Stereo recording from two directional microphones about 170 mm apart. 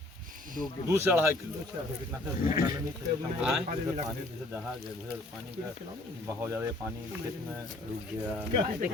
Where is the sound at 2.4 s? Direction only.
20° right (ahead or behind).